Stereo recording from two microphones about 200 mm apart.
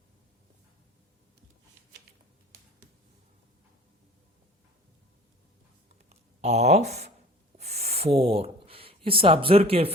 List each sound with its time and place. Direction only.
6.4 s speech: 35° right (ahead or behind)
7.5 s a sound: 35° right (ahead or behind)
9.0 s speech: 25° right (ahead or behind)